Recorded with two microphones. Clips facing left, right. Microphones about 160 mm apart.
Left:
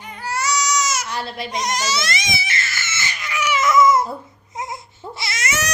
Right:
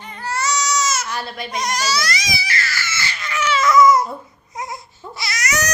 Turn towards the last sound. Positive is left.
turn(degrees=25)  # may be behind; listen again after turning